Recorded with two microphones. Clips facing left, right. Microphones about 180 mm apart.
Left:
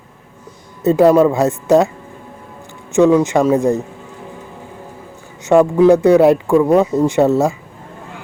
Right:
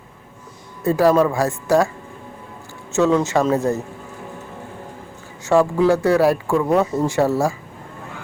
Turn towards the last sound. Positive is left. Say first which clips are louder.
# left 5 dB
turn(degrees=20)  # may be behind; listen again after turning